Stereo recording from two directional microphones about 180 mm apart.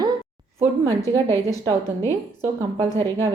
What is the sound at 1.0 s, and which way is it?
Speech, 15° left (ahead or behind).